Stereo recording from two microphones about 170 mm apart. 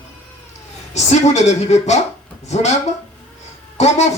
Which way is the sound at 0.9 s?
40° left (ahead or behind).